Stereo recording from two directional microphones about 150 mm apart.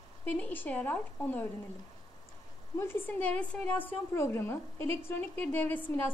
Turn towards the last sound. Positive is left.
turn(degrees=10)  # may be behind; listen again after turning